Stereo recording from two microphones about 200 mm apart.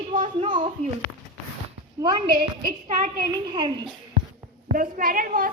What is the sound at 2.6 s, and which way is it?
Speech, 40° right (ahead or behind).